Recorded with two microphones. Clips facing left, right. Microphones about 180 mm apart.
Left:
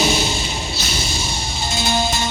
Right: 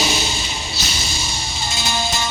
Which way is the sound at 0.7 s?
55° left (ahead or behind).